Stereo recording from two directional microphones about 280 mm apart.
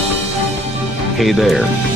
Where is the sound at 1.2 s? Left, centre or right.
Centre.